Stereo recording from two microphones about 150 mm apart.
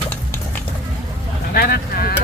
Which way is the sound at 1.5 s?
90° left.